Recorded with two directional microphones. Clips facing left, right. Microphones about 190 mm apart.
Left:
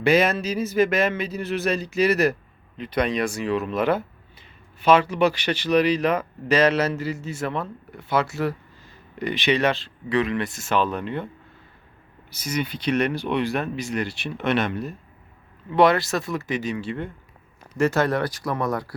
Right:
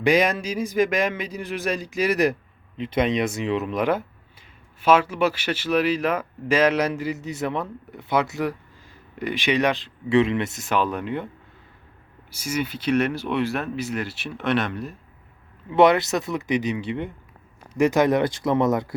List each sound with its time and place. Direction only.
0.0 s speech: 15° right (ahead or behind)
2.7 s speech: 25° right (ahead or behind)
12.3 s speech: 10° right (ahead or behind)
15.7 s speech: 20° right (ahead or behind)